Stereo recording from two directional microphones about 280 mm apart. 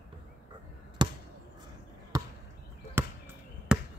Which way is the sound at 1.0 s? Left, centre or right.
Centre.